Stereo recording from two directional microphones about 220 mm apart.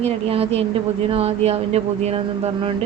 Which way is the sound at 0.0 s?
25° right (ahead or behind).